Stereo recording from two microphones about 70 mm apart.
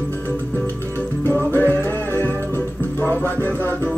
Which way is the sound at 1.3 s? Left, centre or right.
Left.